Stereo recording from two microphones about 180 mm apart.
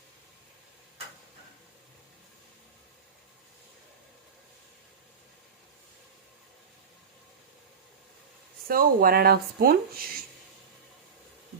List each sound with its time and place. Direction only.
8.6 s speech: 55° right (ahead or behind)